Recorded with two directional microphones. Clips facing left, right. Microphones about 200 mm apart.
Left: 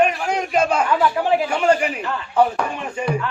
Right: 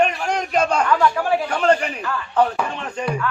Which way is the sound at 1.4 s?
10° left (ahead or behind).